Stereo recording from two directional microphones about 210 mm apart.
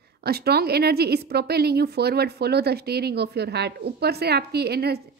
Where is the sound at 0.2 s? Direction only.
50° right (ahead or behind).